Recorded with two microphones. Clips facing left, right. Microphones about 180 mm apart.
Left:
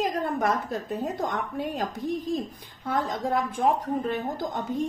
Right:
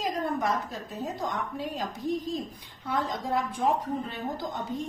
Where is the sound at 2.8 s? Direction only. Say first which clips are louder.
Left 3 dB; 50° left (ahead or behind).